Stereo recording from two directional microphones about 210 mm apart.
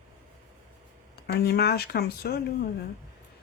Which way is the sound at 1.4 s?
50° left (ahead or behind).